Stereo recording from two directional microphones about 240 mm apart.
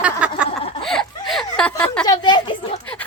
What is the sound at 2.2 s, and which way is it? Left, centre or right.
Speech, centre.